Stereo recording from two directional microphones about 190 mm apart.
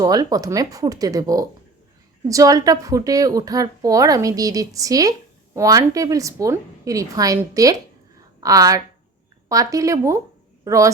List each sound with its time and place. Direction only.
0.0 s a woman's voice: 20° right (ahead or behind)